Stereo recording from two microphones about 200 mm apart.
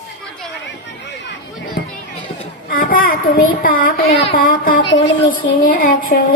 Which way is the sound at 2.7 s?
45° left (ahead or behind).